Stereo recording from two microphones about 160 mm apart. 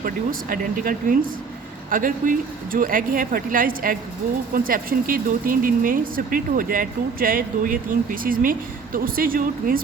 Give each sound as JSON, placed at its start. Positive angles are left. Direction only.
{"t": 0.0, "sound": "speech", "side_deg": -65}